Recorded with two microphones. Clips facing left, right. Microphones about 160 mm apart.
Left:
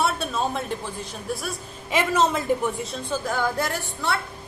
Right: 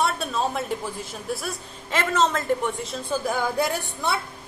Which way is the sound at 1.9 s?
10° left (ahead or behind).